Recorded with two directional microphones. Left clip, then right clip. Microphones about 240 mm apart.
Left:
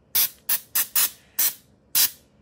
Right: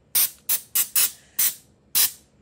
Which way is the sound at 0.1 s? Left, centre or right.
Centre.